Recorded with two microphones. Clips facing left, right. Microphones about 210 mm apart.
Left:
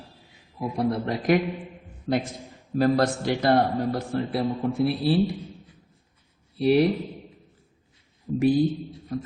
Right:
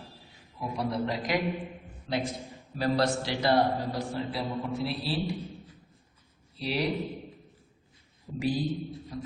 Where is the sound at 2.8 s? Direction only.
50° left (ahead or behind).